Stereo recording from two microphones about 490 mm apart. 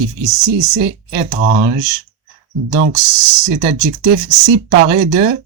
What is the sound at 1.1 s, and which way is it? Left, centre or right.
Speech, centre.